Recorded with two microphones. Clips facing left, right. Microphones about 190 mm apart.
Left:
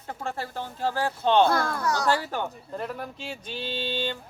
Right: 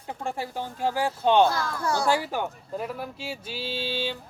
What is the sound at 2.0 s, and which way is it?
Speech, 10° right (ahead or behind).